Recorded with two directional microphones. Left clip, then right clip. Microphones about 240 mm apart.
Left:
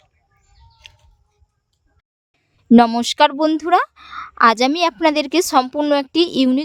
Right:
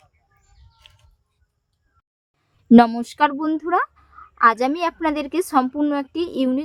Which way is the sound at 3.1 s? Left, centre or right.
Left.